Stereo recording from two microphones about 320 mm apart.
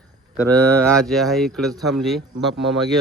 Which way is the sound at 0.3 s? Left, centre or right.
Centre.